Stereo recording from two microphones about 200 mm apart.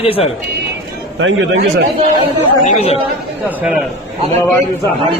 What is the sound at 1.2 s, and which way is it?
Speech, 70° right (ahead or behind).